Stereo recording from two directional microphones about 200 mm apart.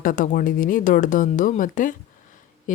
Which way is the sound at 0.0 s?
45° left (ahead or behind).